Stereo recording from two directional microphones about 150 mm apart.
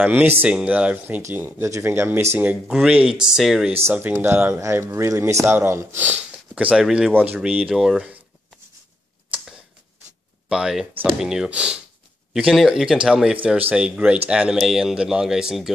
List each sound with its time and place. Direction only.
0.0 s speech: 10° right (ahead or behind)
3.8 s speech: 10° right (ahead or behind)
10.5 s speech: 5° right (ahead or behind)